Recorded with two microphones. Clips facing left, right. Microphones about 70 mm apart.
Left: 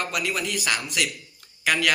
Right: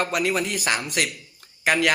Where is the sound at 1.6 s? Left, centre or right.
Right.